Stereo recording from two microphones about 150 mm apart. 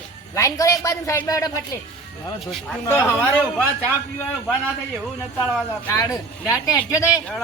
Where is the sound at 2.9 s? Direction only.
15° left (ahead or behind).